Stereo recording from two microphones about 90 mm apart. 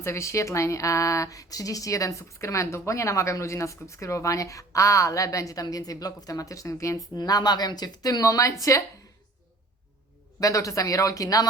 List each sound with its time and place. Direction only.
0.0 s speech: 30° left (ahead or behind)
7.2 s speech: 45° left (ahead or behind)
10.4 s speech: 40° left (ahead or behind)